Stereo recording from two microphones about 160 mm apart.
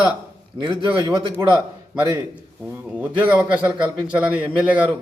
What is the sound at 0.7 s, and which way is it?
Speech, 30° right (ahead or behind).